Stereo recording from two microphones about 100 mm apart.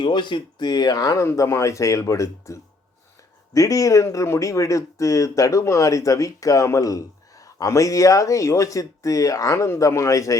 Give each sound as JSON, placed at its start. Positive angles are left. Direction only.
{"t": 0.0, "sound": "speech", "side_deg": 50}